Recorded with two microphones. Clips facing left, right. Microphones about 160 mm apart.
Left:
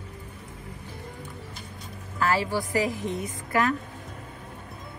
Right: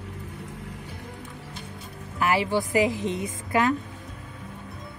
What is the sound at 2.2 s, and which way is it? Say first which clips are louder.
Speech: right 2 dB; 15° right (ahead or behind).